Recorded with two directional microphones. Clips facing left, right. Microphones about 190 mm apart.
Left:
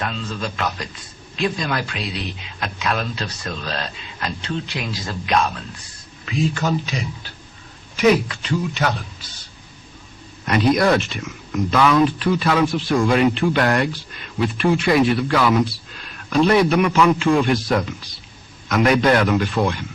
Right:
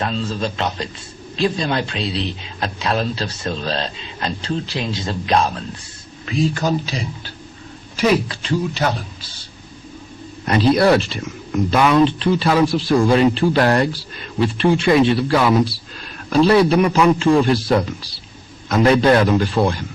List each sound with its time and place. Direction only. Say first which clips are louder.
0.0 s speech: right 4 dB; 30° right (ahead or behind)
10.4 s speech: right 2 dB; 30° right (ahead or behind)